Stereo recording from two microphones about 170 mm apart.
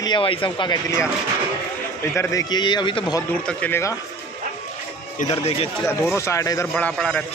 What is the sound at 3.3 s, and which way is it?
Speech, 10° left (ahead or behind).